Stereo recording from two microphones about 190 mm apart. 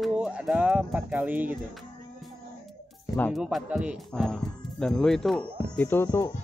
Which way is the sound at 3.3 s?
5° right (ahead or behind).